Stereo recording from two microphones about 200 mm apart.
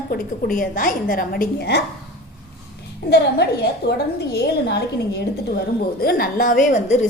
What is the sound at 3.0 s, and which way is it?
A woman's voice, 55° left (ahead or behind).